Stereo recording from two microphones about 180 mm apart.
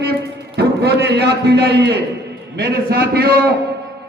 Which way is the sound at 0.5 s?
65° right (ahead or behind).